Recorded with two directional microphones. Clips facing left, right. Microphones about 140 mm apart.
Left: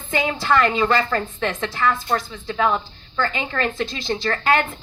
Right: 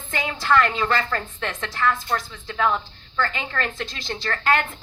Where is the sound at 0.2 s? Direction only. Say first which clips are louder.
Left 1 dB; 10° left (ahead or behind).